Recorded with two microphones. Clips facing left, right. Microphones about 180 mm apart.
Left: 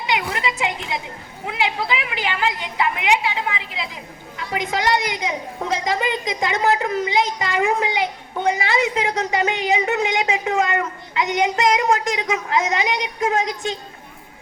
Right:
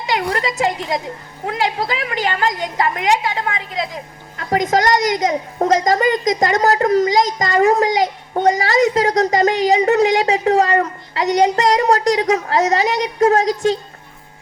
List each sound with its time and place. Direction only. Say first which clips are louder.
0.3 s a woman's voice: right 5 dB; 40° right (ahead or behind)